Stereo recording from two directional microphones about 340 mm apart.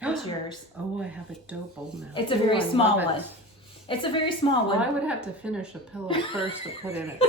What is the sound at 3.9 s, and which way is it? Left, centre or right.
Speech, centre.